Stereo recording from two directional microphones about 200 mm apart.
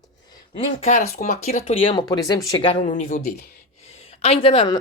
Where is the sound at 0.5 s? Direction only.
30° left (ahead or behind).